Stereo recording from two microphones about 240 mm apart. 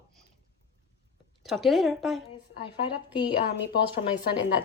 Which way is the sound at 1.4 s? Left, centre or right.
Centre.